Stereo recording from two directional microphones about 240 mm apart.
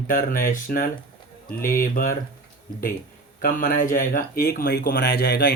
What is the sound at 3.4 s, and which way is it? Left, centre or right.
Speech, left.